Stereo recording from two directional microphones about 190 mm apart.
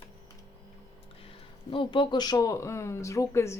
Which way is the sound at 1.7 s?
25° left (ahead or behind).